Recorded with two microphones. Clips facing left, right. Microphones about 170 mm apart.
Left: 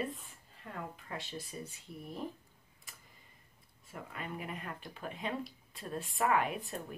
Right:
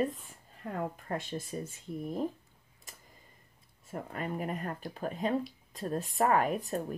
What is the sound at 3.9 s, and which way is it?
Speech, 40° right (ahead or behind).